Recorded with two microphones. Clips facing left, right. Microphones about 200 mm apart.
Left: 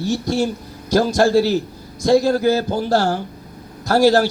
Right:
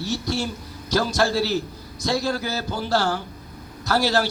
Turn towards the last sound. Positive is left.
turn(degrees=45)  # may be behind; listen again after turning